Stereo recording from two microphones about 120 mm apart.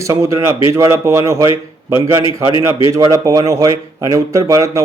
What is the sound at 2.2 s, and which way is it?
Speech, 45° left (ahead or behind).